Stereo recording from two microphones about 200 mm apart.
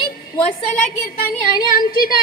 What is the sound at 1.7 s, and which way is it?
Speech, 45° left (ahead or behind).